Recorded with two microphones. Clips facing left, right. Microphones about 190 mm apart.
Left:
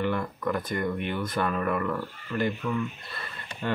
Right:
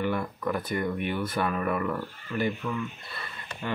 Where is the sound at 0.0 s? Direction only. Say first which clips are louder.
Left 1 dB; 10° right (ahead or behind).